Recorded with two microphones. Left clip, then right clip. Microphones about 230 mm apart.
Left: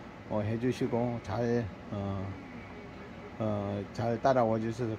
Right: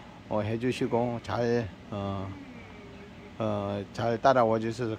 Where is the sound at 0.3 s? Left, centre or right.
Centre.